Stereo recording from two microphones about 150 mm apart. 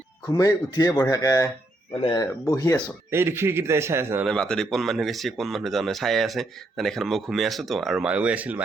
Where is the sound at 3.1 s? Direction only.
15° right (ahead or behind).